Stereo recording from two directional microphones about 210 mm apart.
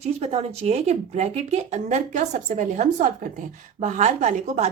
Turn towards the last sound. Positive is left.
turn(degrees=-35)  # may be behind; listen again after turning